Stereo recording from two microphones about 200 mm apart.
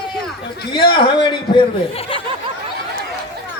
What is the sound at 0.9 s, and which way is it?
Speech, 25° left (ahead or behind).